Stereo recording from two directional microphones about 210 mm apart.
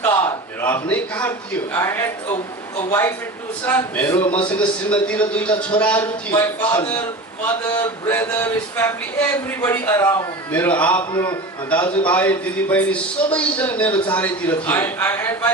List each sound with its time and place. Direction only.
0.0 s a sound: 10° left (ahead or behind)
1.7 s a man's voice: 10° left (ahead or behind)
11.1 s a man's voice: 20° left (ahead or behind)
11.7 s a man's voice: 5° left (ahead or behind)